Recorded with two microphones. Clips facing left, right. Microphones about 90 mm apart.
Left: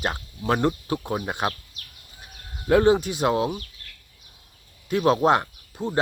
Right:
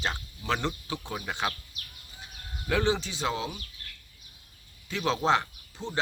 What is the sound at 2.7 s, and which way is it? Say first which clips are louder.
Speech: left 9 dB; 45° left (ahead or behind).